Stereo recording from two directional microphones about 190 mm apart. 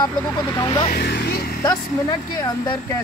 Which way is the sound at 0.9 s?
55° left (ahead or behind).